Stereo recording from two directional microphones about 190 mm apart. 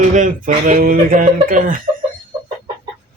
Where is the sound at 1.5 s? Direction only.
45° right (ahead or behind).